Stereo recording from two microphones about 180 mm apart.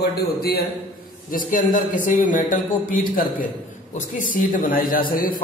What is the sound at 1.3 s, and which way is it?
A man's voice, 45° left (ahead or behind).